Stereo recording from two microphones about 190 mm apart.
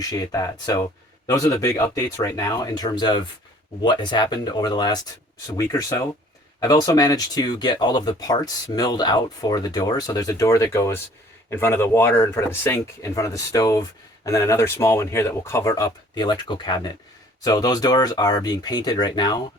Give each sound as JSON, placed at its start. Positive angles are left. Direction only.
{"t": 0.0, "sound": "speech", "side_deg": 20}